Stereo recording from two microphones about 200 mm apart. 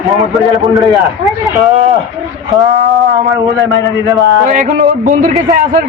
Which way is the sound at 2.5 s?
Centre (ahead or behind).